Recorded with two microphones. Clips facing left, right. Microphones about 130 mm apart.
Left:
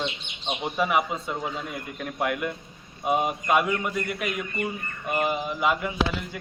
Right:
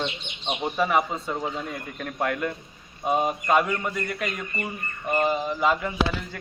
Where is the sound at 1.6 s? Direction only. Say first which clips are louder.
Even; 5° left (ahead or behind).